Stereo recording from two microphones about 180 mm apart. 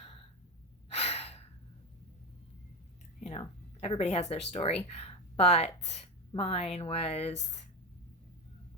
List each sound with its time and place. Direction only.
0.0 s gasp: 30° left (ahead or behind)
3.2 s speech: 35° left (ahead or behind)